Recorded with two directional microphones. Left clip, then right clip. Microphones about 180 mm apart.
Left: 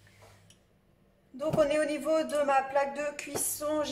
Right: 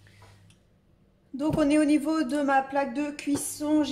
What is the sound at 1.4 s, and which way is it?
A woman's voice, 35° right (ahead or behind).